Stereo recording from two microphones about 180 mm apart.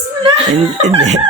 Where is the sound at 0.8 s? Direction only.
40° right (ahead or behind).